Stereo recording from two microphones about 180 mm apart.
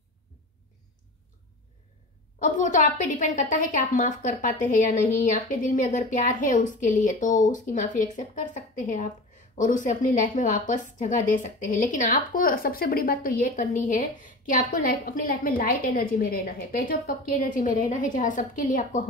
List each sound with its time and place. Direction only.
2.3 s a woman's voice: 45° left (ahead or behind)